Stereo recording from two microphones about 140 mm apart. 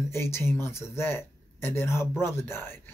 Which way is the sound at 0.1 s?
20° left (ahead or behind).